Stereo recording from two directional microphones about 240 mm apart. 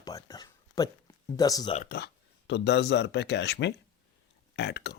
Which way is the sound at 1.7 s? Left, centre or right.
Left.